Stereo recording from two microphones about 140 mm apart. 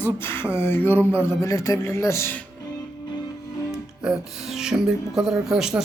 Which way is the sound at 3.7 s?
5° right (ahead or behind).